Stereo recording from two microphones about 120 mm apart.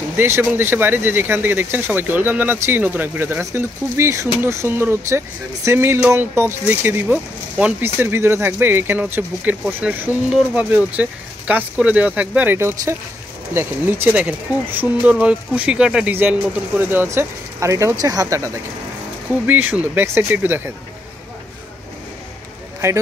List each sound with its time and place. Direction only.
0.2 s speech: 20° right (ahead or behind)
19.4 s speech: 15° right (ahead or behind)
22.8 s speech: 25° right (ahead or behind)